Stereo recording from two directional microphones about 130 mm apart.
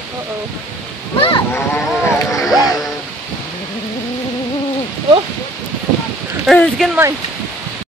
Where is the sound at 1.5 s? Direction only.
20° left (ahead or behind).